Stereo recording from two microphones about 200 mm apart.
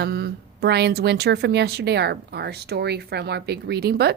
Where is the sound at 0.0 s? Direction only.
55° right (ahead or behind).